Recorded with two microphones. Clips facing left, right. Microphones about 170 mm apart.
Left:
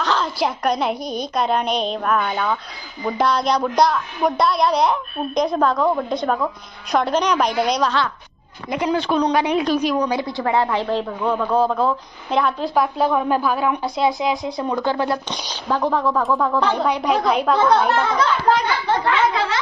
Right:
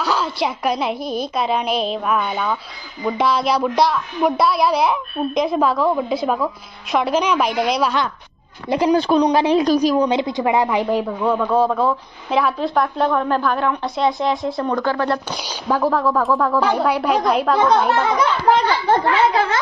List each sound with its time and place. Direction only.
0.0 s a woman's voice: 5° right (ahead or behind)
8.6 s a woman's voice: 30° right (ahead or behind)
10.0 s speech: 20° right (ahead or behind); by 14.5 s centre (ahead or behind)
14.6 s speech: 15° left (ahead or behind)
15.7 s speech: centre (ahead or behind)
18.9 s speech: 50° right (ahead or behind)